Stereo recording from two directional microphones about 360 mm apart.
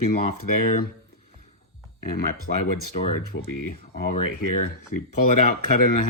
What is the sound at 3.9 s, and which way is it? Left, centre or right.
Speech, left.